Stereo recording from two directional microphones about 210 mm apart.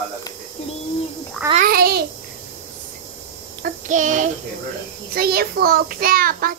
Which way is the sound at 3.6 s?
40° right (ahead or behind).